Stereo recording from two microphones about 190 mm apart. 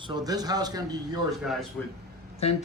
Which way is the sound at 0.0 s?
20° right (ahead or behind).